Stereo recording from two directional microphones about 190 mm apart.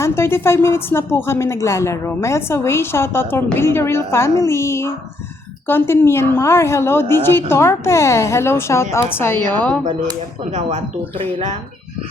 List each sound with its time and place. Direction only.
0.0 s a woman's voice: 10° left (ahead or behind)
10.5 s speech: 35° right (ahead or behind)